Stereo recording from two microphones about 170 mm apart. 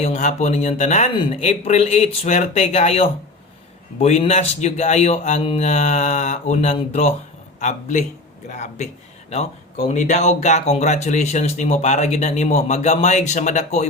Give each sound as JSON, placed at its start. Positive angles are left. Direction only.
{"t": 0.0, "sound": "a man's voice", "side_deg": 40}